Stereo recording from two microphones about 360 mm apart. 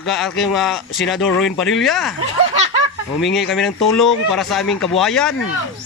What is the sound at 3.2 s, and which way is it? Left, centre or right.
Speech, centre.